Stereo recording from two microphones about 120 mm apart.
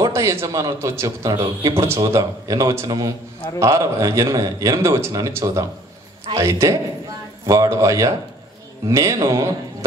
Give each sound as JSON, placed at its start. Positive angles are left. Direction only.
{"t": 0.0, "sound": "a man's voice", "side_deg": -25}
{"t": 1.3, "sound": "speech", "side_deg": -40}
{"t": 1.7, "sound": "a man's voice", "side_deg": -25}